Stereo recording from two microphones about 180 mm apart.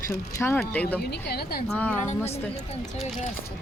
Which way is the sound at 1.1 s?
60° left (ahead or behind).